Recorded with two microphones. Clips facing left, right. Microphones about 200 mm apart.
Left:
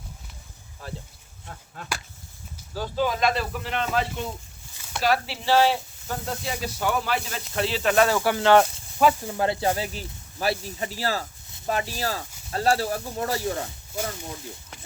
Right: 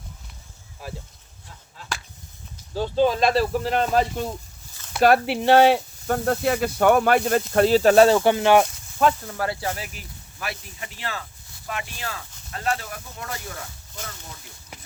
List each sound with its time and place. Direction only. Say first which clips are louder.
0.8 s speech: right 1 dB; 10° right (ahead or behind)
1.5 s a sound: left 5 dB; 55° left (ahead or behind)
2.7 s speech: right 6 dB; 25° right (ahead or behind)
5.0 s speech: right 7 dB; 55° right (ahead or behind); by 8.6 s 15° right (ahead or behind)
9.0 s speech: even; 5° left (ahead or behind)
9.4 s speech: left 4 dB; 25° left (ahead or behind)